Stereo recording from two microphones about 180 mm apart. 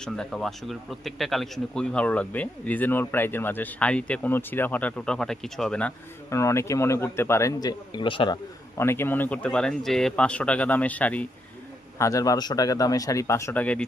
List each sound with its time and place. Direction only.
0.0 s a man's voice: 5° left (ahead or behind)
6.3 s a man's voice: 15° left (ahead or behind)
8.8 s a man's voice: 15° left (ahead or behind)